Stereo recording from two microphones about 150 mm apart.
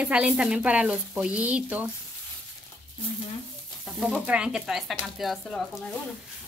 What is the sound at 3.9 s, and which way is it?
Speech, 5° right (ahead or behind).